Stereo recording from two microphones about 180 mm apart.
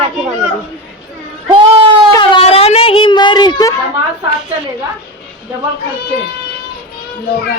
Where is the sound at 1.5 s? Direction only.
30° right (ahead or behind).